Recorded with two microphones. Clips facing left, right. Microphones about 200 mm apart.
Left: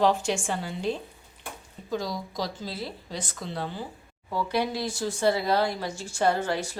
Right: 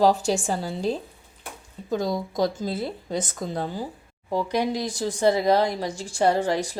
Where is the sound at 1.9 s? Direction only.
50° right (ahead or behind).